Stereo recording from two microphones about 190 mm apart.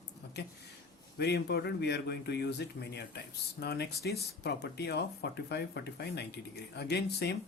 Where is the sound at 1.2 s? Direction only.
60° left (ahead or behind).